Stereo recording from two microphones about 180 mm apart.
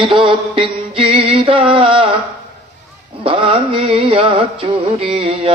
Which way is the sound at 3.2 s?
30° right (ahead or behind).